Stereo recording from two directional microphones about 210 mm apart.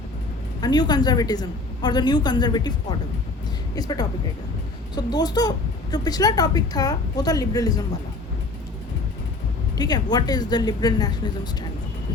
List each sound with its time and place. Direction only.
0.6 s a woman's voice: 20° left (ahead or behind)
3.8 s a woman's voice: 20° left (ahead or behind)
9.7 s a woman's voice: 20° left (ahead or behind)